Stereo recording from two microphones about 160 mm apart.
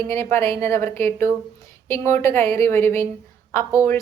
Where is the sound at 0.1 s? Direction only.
15° left (ahead or behind).